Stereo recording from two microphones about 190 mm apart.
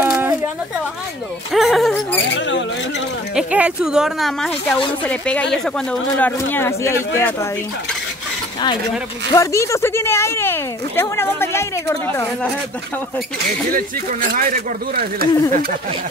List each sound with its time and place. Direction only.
0.0 s a sound: 10° right (ahead or behind)
1.5 s speech: centre (ahead or behind)
2.3 s speech: 70° left (ahead or behind)
3.3 s speech: 5° right (ahead or behind); by 7.3 s 15° left (ahead or behind)
9.3 s speech: 15° left (ahead or behind)
14.3 s speech: 50° right (ahead or behind)